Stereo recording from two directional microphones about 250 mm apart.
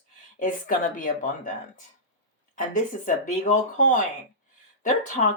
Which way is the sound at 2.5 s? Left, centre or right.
Left.